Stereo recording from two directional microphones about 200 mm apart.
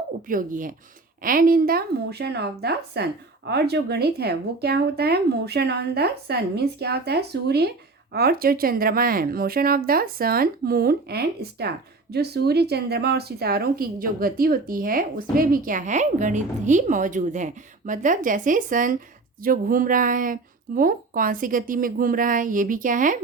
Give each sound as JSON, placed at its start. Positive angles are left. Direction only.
{"t": 0.3, "sound": "speech", "side_deg": -45}